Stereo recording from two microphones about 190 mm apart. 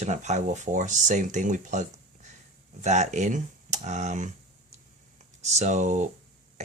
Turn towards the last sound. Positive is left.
turn(degrees=-40)  # may be behind; listen again after turning